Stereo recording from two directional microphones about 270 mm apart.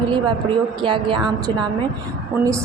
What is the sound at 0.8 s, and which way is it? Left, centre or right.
Speech, centre.